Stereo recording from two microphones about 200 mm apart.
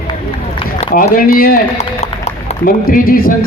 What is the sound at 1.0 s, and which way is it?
Speech, 45° left (ahead or behind).